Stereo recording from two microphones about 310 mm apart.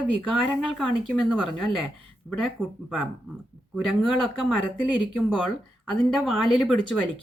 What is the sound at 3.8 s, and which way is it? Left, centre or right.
Speech, centre.